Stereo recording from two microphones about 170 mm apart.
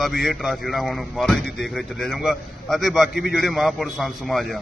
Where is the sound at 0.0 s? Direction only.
Centre (ahead or behind).